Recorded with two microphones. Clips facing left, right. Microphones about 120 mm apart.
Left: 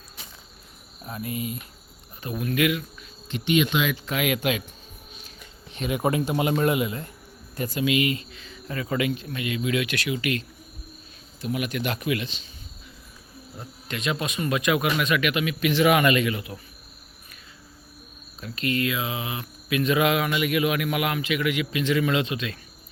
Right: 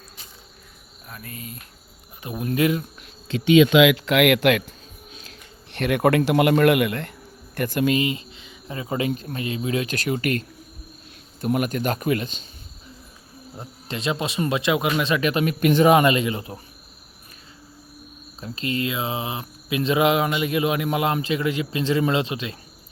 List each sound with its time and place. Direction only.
1.0 s speech: 25° left (ahead or behind)
1.3 s speech: 10° left (ahead or behind)
2.2 s speech: 25° right (ahead or behind)
3.8 s speech: 90° right
5.7 s speech: 65° right (ahead or behind)
7.5 s speech: 60° right (ahead or behind)
7.9 s speech: 25° right (ahead or behind); by 12.5 s 45° right (ahead or behind)
13.6 s speech: 30° right (ahead or behind); by 15.9 s 45° right (ahead or behind)
15.9 s speech: 30° right (ahead or behind)
18.3 s speech: 30° right (ahead or behind)